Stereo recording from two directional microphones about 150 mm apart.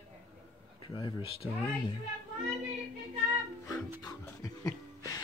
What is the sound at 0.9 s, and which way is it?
Speech, 35° left (ahead or behind).